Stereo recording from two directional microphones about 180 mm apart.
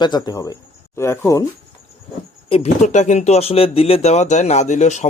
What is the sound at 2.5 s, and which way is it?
Speech, 35° left (ahead or behind).